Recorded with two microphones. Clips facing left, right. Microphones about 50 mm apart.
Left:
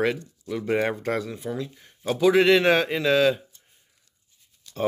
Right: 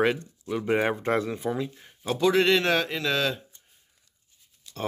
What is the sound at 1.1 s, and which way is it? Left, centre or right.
Speech, right.